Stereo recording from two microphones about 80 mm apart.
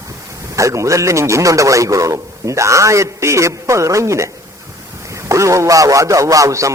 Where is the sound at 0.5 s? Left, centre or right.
Right.